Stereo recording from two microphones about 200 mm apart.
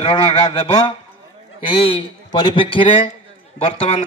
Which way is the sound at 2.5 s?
25° left (ahead or behind).